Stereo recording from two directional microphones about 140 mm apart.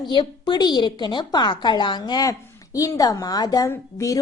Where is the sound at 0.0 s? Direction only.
35° left (ahead or behind).